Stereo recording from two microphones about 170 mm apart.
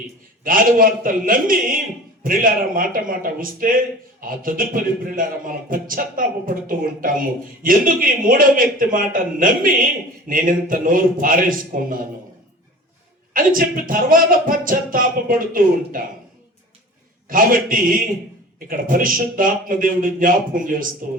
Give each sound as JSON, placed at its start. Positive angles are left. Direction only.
{"t": 0.4, "sound": "a man's voice", "side_deg": -55}
{"t": 13.3, "sound": "a man's voice", "side_deg": -55}
{"t": 17.2, "sound": "a man's voice", "side_deg": -55}